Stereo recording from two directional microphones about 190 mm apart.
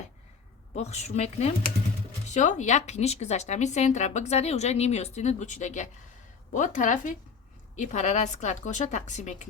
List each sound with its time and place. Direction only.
0.8 s a woman's voice: 35° left (ahead or behind)